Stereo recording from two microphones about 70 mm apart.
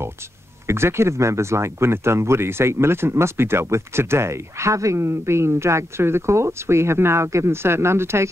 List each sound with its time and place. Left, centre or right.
0.7 s speech: right